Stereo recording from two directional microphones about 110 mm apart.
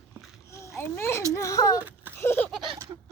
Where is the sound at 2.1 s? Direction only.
20° left (ahead or behind).